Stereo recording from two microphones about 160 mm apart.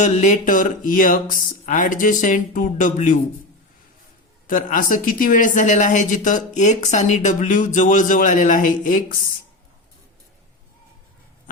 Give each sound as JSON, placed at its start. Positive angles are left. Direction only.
{"t": 0.0, "sound": "speech", "side_deg": 50}
{"t": 4.4, "sound": "speech", "side_deg": 55}